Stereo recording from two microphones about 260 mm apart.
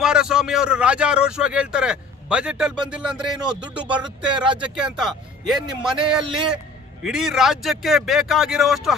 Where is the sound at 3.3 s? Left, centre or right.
Centre.